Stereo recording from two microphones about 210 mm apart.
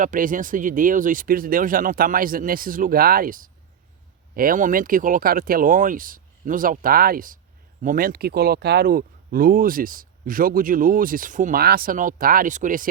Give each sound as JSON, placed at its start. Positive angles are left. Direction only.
{"t": 0.0, "sound": "speech", "side_deg": -40}